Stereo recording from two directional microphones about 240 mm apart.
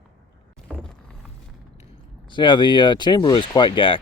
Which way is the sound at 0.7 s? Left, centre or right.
Centre.